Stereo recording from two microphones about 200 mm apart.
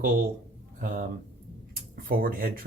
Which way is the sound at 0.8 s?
45° right (ahead or behind).